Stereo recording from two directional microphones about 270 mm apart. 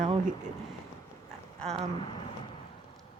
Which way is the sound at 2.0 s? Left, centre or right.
Centre.